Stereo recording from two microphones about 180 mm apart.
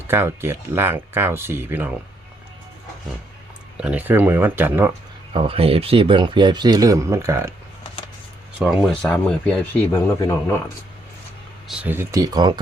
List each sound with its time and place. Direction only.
0.1 s speech: 15° right (ahead or behind)
3.8 s speech: 10° right (ahead or behind)
5.3 s speech: 30° right (ahead or behind); by 7.5 s 15° right (ahead or behind)
8.5 s speech: centre (ahead or behind)
11.7 s speech: 10° right (ahead or behind)